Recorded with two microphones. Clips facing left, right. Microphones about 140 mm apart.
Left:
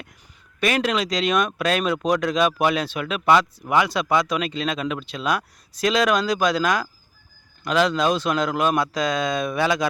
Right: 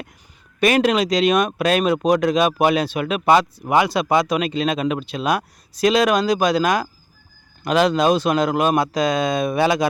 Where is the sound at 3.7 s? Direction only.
10° right (ahead or behind).